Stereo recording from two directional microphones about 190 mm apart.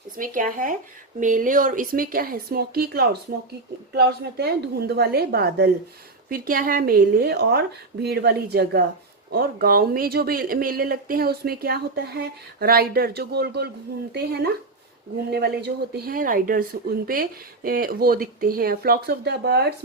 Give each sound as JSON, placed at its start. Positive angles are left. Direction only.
{"t": 0.2, "sound": "a woman's voice", "side_deg": -45}